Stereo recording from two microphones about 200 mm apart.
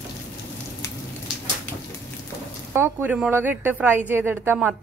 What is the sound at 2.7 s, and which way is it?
A woman's voice, 10° right (ahead or behind).